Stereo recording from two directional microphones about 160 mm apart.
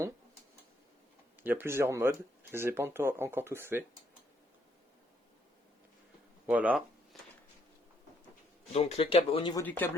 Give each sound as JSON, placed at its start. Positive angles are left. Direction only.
{"t": 1.4, "sound": "speech", "side_deg": -15}
{"t": 6.5, "sound": "speech", "side_deg": -10}
{"t": 8.7, "sound": "speech", "side_deg": 40}
{"t": 9.6, "sound": "speech", "side_deg": 10}